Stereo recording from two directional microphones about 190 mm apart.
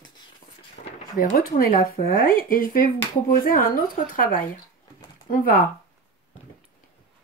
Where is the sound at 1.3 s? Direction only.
50° left (ahead or behind).